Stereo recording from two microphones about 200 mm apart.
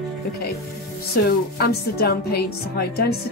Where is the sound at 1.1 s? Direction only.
50° left (ahead or behind).